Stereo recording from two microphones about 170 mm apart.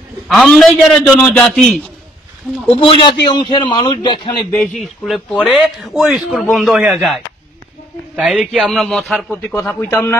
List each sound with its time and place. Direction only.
0.3 s a man's voice: centre (ahead or behind)
2.7 s a man's voice: 30° left (ahead or behind)
4.7 s a man's voice: centre (ahead or behind)
8.2 s a man's voice: centre (ahead or behind)